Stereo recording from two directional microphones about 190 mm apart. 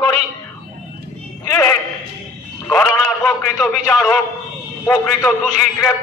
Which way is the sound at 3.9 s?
5° left (ahead or behind).